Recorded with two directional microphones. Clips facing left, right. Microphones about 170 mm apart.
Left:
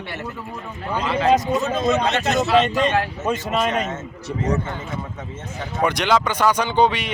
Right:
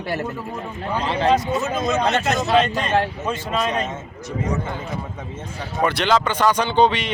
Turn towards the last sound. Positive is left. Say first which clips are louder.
# right 1 dB
turn(degrees=10)  # may be behind; listen again after turning